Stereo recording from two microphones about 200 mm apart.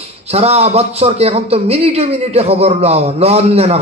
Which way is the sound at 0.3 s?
30° right (ahead or behind).